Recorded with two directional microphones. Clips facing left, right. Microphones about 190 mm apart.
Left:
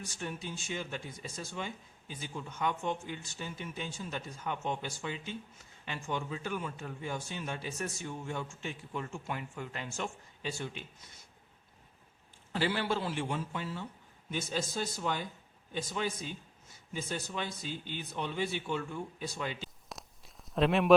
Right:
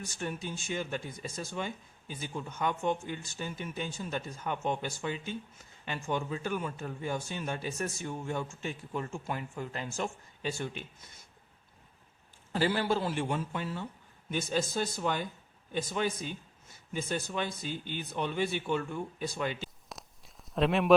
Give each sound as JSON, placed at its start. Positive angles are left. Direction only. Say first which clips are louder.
{"t": 0.2, "sound": "speech", "louder": "right 3 dB", "side_deg": -50}
{"t": 12.5, "sound": "a man's voice", "louder": "right 3 dB", "side_deg": -40}
{"t": 19.9, "sound": "a sound", "louder": "even", "side_deg": 0}